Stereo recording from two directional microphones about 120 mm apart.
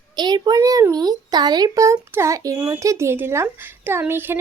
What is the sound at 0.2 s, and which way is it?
A woman's voice, 35° right (ahead or behind).